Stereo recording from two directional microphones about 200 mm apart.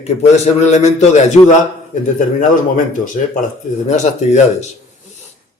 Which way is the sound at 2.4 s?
40° left (ahead or behind).